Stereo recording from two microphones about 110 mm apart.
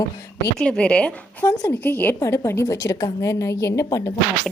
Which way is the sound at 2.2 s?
25° left (ahead or behind).